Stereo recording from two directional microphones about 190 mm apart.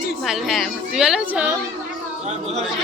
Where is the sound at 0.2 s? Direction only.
Centre (ahead or behind).